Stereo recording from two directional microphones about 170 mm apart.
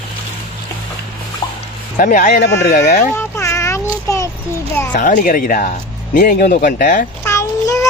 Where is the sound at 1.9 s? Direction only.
50° left (ahead or behind).